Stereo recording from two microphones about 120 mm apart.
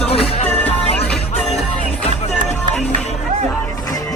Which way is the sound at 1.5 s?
60° left (ahead or behind).